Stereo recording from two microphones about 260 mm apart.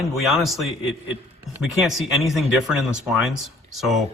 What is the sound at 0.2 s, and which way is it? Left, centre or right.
A man's voice, centre.